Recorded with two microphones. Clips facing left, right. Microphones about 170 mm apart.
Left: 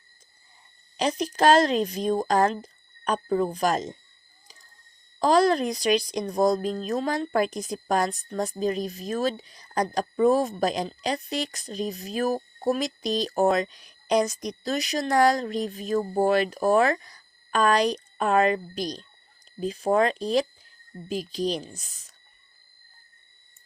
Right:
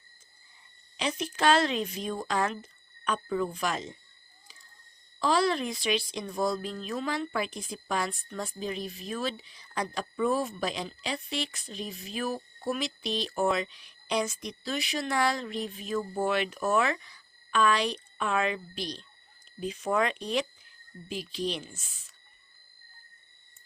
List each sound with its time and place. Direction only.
0.9 s speech: 40° left (ahead or behind)
5.2 s speech: 45° left (ahead or behind)